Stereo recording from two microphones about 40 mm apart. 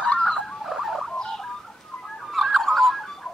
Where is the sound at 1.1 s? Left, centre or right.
Centre.